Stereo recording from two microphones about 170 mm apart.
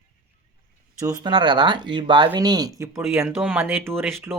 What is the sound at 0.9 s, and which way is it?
Speech, 20° right (ahead or behind).